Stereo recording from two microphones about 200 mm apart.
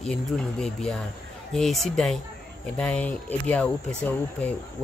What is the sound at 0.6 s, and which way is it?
Speech, 5° left (ahead or behind).